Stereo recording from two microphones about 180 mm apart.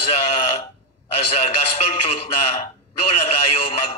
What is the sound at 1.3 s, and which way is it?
Speech, 35° left (ahead or behind).